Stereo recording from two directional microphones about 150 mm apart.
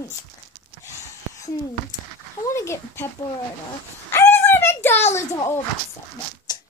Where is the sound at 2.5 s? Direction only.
20° left (ahead or behind).